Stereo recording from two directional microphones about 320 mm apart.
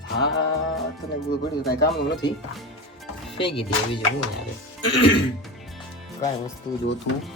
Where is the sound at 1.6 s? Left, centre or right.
Left.